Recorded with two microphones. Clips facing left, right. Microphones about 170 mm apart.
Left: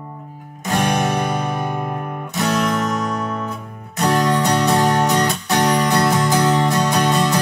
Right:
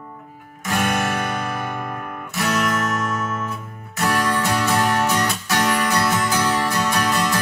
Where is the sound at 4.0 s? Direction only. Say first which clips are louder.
Left 4 dB; 20° left (ahead or behind).